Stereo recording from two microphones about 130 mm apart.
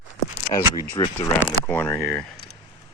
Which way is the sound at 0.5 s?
35° left (ahead or behind).